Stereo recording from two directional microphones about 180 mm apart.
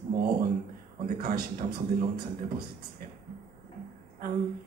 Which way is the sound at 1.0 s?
50° right (ahead or behind).